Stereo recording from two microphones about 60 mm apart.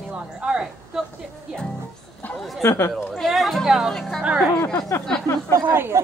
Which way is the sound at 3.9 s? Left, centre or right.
Centre.